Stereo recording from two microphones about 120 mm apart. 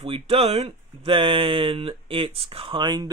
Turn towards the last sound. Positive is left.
turn(degrees=-40)  # may be behind; listen again after turning